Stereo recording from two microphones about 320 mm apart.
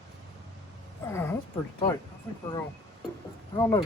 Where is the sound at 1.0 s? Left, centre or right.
Centre.